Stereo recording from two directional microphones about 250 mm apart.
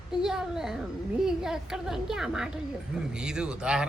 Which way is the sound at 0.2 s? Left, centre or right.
Centre.